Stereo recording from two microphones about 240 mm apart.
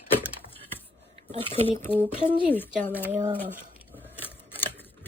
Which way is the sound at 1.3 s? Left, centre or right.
Right.